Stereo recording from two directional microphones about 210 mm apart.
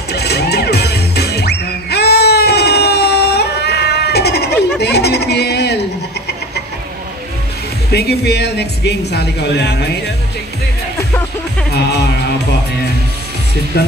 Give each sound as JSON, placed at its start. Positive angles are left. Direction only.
{"t": 0.1, "sound": "music", "side_deg": 50}
{"t": 7.9, "sound": "speech", "side_deg": 50}
{"t": 13.7, "sound": "speech", "side_deg": 50}